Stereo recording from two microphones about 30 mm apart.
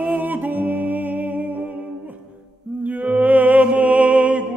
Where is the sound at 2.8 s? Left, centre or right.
Right.